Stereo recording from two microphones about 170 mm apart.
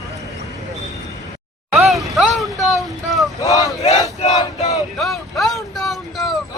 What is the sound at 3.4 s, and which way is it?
Boat, 20° left (ahead or behind).